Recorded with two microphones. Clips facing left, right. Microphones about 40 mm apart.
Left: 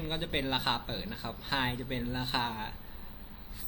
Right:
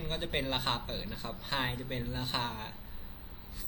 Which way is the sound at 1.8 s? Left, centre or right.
Left.